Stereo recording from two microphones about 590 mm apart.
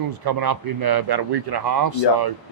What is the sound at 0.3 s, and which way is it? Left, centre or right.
A man's voice, right.